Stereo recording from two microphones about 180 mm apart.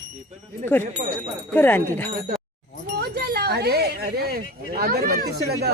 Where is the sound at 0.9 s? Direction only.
45° right (ahead or behind).